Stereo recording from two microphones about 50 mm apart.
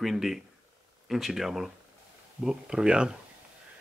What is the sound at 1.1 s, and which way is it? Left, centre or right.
Speech, centre.